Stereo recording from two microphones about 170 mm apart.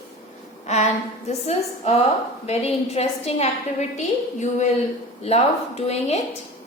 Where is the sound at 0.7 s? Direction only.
40° left (ahead or behind).